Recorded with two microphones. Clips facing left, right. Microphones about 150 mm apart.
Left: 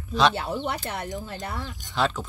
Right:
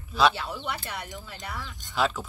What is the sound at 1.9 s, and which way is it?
Speech, 5° right (ahead or behind).